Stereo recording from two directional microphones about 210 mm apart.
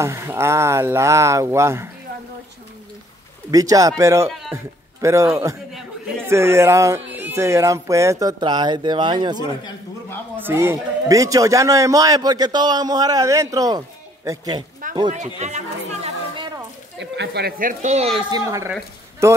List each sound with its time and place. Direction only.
0.0 s a man's voice: 10° right (ahead or behind)
3.5 s a man's voice: 15° right (ahead or behind)
4.3 s a man's voice: centre (ahead or behind)
5.0 s a man's voice: 15° right (ahead or behind)
10.3 s a man's voice: 10° right (ahead or behind)
15.0 s speech: 35° right (ahead or behind)
17.0 s speech: 55° right (ahead or behind); by 18.4 s 25° right (ahead or behind)
19.2 s a man's voice: 15° right (ahead or behind)